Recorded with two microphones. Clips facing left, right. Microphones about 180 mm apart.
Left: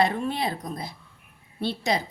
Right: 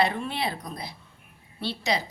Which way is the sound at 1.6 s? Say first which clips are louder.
Left 2 dB; 50° left (ahead or behind).